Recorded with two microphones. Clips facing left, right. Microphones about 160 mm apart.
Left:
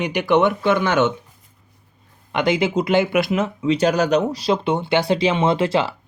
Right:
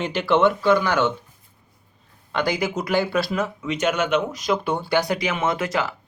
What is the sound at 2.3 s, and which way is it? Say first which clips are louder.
Speech: left 5 dB; 25° left (ahead or behind).